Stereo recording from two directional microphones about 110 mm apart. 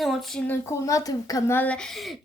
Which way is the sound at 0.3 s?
15° left (ahead or behind).